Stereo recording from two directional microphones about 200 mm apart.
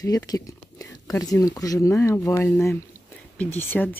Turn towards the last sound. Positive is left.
turn(degrees=10)  # may be behind; listen again after turning